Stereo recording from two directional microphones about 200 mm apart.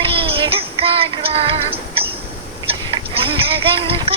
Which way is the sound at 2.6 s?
25° right (ahead or behind).